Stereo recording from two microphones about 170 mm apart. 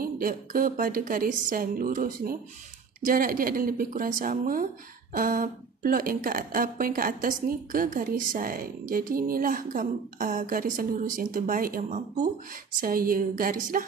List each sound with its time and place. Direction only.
0.0 s a woman's voice: 55° right (ahead or behind)